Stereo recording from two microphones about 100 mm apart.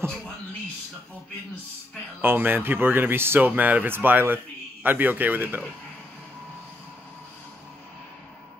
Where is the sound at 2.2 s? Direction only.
20° right (ahead or behind).